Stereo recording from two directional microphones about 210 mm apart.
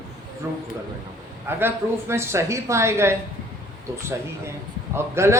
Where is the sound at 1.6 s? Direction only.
10° right (ahead or behind).